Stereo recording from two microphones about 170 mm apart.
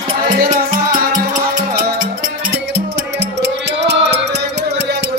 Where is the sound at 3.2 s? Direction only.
85° right.